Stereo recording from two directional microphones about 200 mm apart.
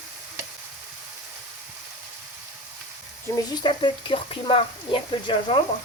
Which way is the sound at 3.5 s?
25° left (ahead or behind).